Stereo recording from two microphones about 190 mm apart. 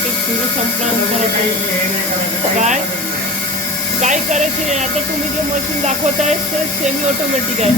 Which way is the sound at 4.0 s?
40° right (ahead or behind).